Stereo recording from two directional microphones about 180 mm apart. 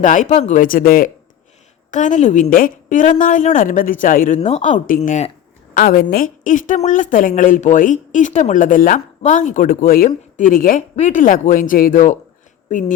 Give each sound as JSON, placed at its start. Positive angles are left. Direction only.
{"t": 0.0, "sound": "a woman's voice", "side_deg": 45}
{"t": 4.4, "sound": "a woman's voice", "side_deg": 35}